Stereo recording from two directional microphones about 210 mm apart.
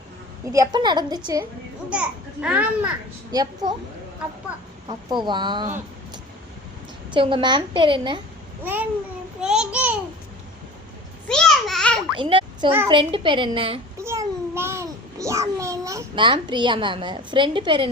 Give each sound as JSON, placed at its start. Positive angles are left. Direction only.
{"t": 0.5, "sound": "a woman's voice", "side_deg": -15}
{"t": 1.9, "sound": "speech", "side_deg": -5}
{"t": 3.3, "sound": "a woman's voice", "side_deg": -20}
{"t": 4.9, "sound": "a woman's voice", "side_deg": -20}
{"t": 7.1, "sound": "a woman's voice", "side_deg": -25}
{"t": 8.6, "sound": "babbling", "side_deg": -10}
{"t": 9.4, "sound": "a child's voice", "side_deg": -5}
{"t": 11.3, "sound": "a sound", "side_deg": 0}
{"t": 12.1, "sound": "a child's voice", "side_deg": -25}
{"t": 14.0, "sound": "a sound", "side_deg": -10}